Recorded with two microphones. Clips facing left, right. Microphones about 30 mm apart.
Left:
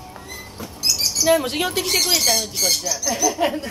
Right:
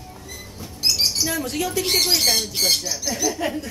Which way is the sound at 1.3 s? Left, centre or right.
Left.